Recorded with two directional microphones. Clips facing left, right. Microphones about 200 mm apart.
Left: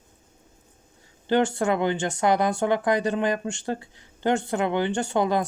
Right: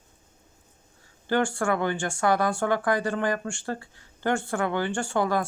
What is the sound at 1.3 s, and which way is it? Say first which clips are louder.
Speech: left 3 dB; 20° left (ahead or behind).